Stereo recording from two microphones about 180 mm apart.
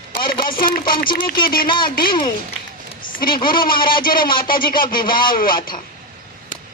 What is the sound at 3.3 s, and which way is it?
Speech, 50° left (ahead or behind).